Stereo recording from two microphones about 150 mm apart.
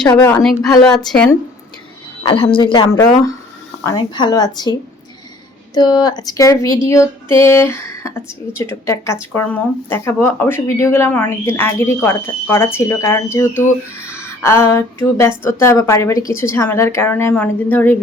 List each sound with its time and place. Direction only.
0.1 s speech: 20° left (ahead or behind)
0.9 s a woman's voice: 5° left (ahead or behind)
2.2 s speech: 35° left (ahead or behind)
5.7 s speech: 30° left (ahead or behind); by 17.9 s 10° left (ahead or behind)